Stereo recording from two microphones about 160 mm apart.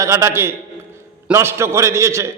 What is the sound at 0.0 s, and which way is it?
A man's voice, 20° right (ahead or behind).